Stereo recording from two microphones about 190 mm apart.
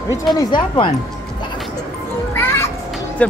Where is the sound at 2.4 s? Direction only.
15° left (ahead or behind).